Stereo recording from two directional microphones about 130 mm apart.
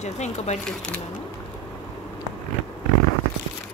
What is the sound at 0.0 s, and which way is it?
Speech, 60° left (ahead or behind).